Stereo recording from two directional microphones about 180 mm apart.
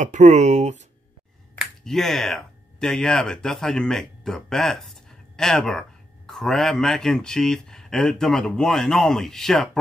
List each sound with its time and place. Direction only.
0.0 s speech: 40° right (ahead or behind)
1.6 s speech: centre (ahead or behind)